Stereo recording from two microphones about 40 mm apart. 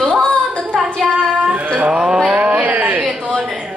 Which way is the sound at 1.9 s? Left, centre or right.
Centre.